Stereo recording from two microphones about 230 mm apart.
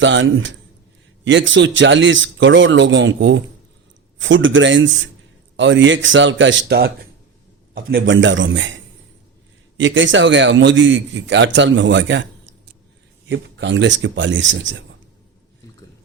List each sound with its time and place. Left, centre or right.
0.0 s a man's voice: right
9.7 s a man's voice: right